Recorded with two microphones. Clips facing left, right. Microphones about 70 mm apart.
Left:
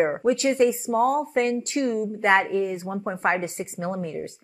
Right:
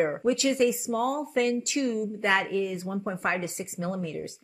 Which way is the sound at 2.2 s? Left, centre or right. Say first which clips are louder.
Left 6 dB; left.